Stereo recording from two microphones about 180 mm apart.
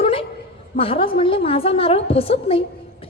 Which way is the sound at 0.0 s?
30° left (ahead or behind).